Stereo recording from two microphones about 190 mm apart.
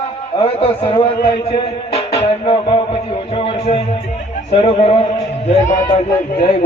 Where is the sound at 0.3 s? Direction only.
30° left (ahead or behind).